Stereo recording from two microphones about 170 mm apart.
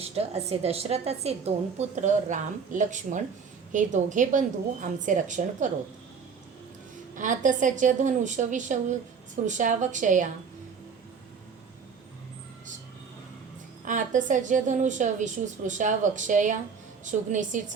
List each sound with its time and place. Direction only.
0.0 s a woman's voice: 35° right (ahead or behind)
7.2 s a woman's voice: 50° right (ahead or behind)
13.8 s a woman's voice: 50° right (ahead or behind)